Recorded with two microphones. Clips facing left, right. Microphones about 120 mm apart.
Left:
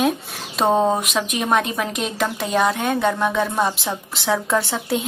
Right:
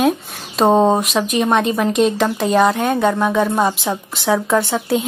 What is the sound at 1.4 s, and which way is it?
Speech, centre (ahead or behind).